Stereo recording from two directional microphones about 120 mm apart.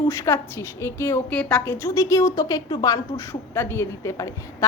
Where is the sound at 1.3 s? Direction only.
10° left (ahead or behind).